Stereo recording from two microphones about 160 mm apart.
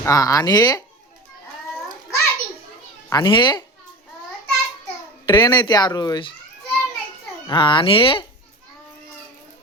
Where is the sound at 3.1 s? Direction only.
30° left (ahead or behind).